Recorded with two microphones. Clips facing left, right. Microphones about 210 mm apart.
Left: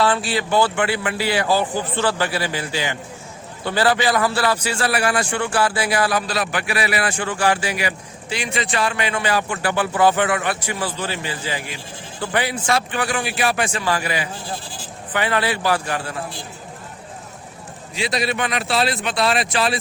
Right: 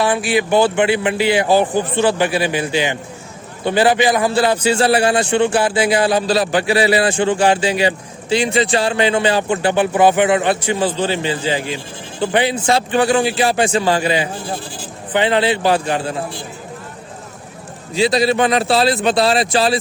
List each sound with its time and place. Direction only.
0.0 s a man's voice: 15° right (ahead or behind)
17.9 s a man's voice: 30° right (ahead or behind)